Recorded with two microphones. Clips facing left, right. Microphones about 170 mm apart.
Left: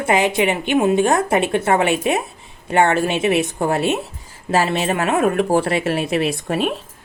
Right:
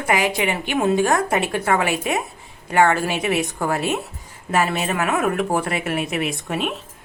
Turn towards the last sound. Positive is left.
turn(degrees=35)  # may be behind; listen again after turning